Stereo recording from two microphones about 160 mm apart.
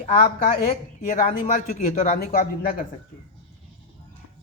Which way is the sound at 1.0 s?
60° left (ahead or behind).